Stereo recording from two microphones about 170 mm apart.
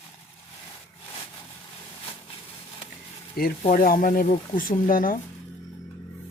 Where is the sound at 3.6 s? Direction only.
50° left (ahead or behind).